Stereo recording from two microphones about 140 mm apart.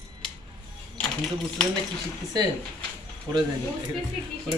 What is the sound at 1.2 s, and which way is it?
Speech, 5° left (ahead or behind).